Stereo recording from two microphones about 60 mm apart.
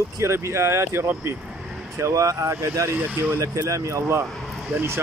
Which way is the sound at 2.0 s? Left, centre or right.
Right.